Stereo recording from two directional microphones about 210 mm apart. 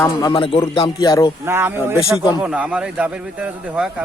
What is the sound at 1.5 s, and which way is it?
Speech, 10° right (ahead or behind).